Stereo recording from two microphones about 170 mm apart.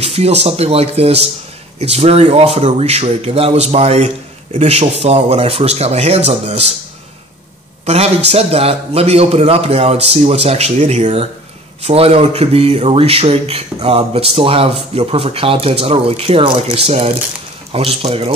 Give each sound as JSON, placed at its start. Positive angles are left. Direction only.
{"t": 0.0, "sound": "speech", "side_deg": -35}
{"t": 7.8, "sound": "speech", "side_deg": -40}